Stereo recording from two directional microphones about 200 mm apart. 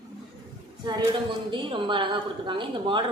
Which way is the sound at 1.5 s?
25° right (ahead or behind).